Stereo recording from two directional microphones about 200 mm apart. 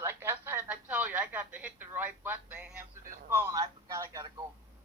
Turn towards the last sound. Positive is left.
turn(degrees=-20)  # may be behind; listen again after turning